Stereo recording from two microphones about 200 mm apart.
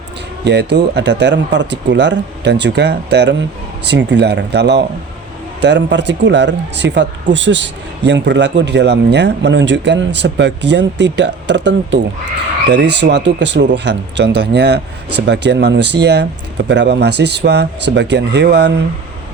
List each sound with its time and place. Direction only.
0.4 s a man's voice: 55° right (ahead or behind)